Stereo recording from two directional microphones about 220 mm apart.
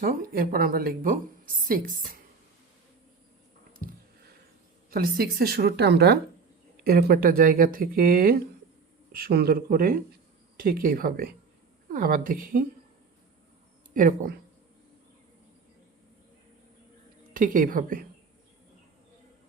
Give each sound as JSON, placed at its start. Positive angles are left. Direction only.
{"t": 0.0, "sound": "speech", "side_deg": -40}
{"t": 4.9, "sound": "a woman's voice", "side_deg": -45}
{"t": 13.9, "sound": "speech", "side_deg": -40}
{"t": 17.3, "sound": "speech", "side_deg": -40}